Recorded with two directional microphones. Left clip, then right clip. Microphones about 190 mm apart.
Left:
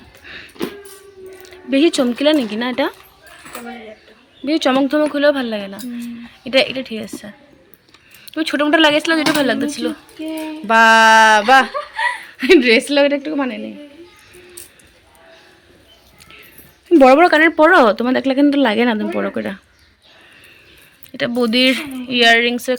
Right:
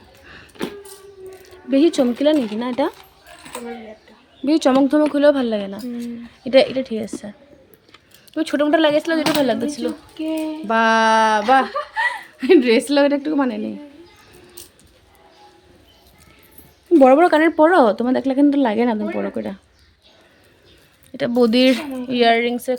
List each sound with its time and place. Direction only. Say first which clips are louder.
0.3 s a sound: left 8 dB; 20° right (ahead or behind)
1.4 s speech: left 1 dB; 10° right (ahead or behind)
4.4 s a woman's voice: even; 25° right (ahead or behind)
16.9 s speech: left 3 dB; centre (ahead or behind)
21.1 s speech: right 1 dB; 15° right (ahead or behind)